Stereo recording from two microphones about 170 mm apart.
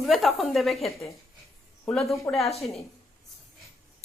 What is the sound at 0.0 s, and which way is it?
Speech, centre (ahead or behind).